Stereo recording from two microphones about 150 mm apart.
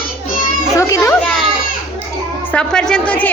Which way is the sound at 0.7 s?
20° left (ahead or behind).